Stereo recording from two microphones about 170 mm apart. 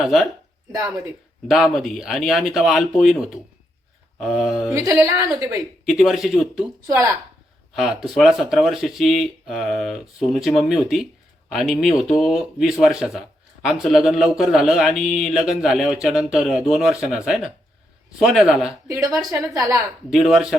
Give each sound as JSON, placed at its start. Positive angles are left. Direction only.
{"t": 0.0, "sound": "speech", "side_deg": 0}
{"t": 1.5, "sound": "speech", "side_deg": 0}
{"t": 4.9, "sound": "a woman's voice", "side_deg": -20}
{"t": 5.8, "sound": "speech", "side_deg": 0}
{"t": 7.8, "sound": "speech", "side_deg": 0}
{"t": 18.9, "sound": "a woman's voice", "side_deg": -20}
{"t": 20.1, "sound": "speech", "side_deg": 0}